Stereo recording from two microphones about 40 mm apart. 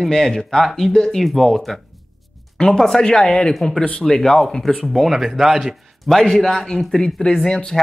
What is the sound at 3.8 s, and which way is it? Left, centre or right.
Speech, left.